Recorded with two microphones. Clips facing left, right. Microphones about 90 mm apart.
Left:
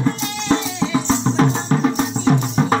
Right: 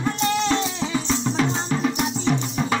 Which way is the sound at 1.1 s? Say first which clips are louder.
Left 5 dB; 35° left (ahead or behind).